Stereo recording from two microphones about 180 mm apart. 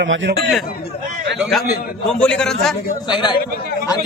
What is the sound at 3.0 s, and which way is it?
Speech, 25° left (ahead or behind).